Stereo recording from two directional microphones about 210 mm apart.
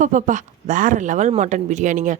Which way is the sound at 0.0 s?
35° right (ahead or behind).